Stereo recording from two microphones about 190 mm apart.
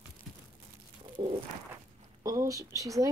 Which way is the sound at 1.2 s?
30° right (ahead or behind).